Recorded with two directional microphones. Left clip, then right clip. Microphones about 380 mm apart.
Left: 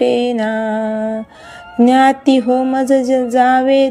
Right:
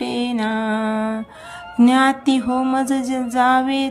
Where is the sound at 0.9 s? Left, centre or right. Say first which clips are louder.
Left 3 dB; right.